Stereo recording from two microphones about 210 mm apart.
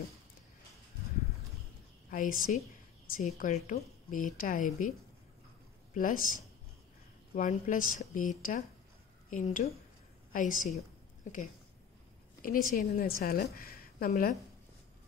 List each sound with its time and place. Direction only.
2.0 s a woman's voice: 40° left (ahead or behind)
5.9 s a woman's voice: 40° left (ahead or behind)
12.4 s a woman's voice: 40° left (ahead or behind)